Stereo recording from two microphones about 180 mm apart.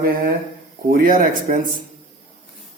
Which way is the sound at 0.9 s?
50° right (ahead or behind).